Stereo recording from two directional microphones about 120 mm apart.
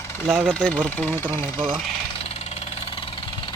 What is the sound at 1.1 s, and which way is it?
Speech, 20° right (ahead or behind).